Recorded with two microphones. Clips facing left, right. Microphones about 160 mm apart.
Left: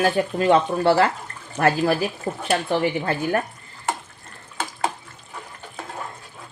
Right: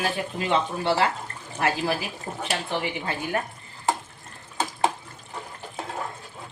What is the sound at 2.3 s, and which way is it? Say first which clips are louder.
Speech: left 6 dB; 85° left.